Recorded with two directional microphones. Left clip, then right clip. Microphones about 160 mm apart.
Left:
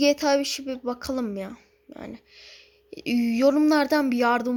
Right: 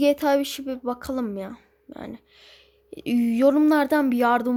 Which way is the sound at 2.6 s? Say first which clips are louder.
Right 3 dB; 60° right (ahead or behind).